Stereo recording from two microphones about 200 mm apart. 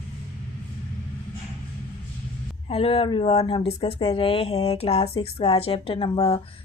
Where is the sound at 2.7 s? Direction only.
30° left (ahead or behind).